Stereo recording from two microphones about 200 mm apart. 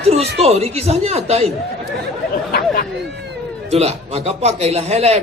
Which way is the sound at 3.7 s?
30° right (ahead or behind).